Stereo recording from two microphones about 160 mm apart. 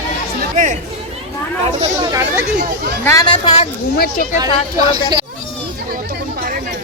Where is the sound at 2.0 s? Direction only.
20° right (ahead or behind).